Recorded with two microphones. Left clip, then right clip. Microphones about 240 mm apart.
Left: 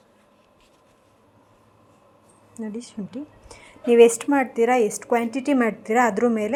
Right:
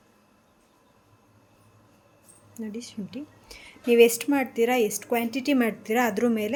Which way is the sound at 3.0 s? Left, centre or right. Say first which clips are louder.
Left 3 dB; centre.